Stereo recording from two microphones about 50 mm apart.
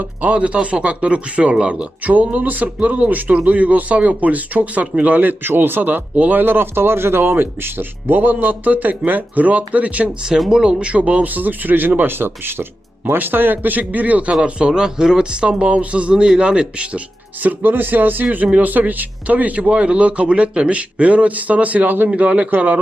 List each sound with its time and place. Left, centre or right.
0.0 s speech: right
2.0 s speech: right
10.5 s speech: centre
14.4 s speech: centre
17.4 s speech: right